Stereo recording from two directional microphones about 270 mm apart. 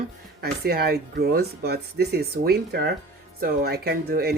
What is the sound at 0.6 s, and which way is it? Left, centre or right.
Speech, right.